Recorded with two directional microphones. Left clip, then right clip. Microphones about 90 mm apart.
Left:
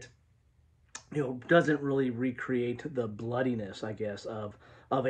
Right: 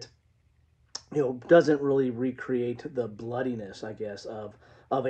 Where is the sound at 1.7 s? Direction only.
35° right (ahead or behind); by 4.5 s 10° right (ahead or behind).